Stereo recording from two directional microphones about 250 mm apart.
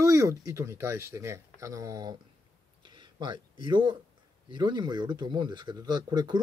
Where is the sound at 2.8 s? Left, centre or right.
Centre.